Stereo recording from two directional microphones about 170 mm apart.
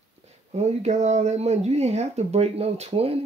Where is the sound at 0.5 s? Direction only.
40° right (ahead or behind).